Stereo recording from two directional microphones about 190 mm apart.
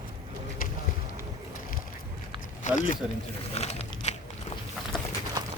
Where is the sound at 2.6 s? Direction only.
40° left (ahead or behind).